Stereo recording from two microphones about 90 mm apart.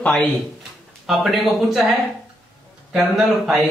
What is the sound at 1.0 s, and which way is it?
Speech, centre (ahead or behind).